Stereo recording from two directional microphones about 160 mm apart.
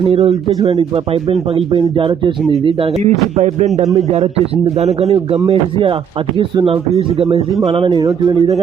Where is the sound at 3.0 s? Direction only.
45° right (ahead or behind).